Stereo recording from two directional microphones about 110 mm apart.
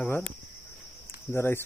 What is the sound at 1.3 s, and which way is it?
Speech, 20° left (ahead or behind).